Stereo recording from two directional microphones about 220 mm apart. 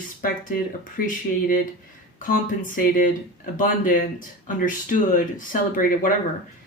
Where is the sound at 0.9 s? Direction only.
35° left (ahead or behind).